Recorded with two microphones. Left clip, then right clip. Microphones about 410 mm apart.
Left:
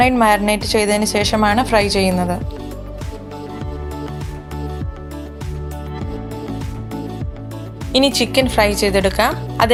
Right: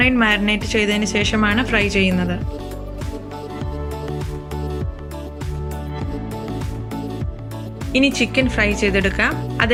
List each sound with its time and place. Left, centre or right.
0.0 s a woman's voice: centre
7.9 s a woman's voice: centre